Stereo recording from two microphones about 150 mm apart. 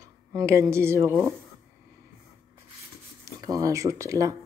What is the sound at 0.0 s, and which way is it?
Speech, 25° right (ahead or behind).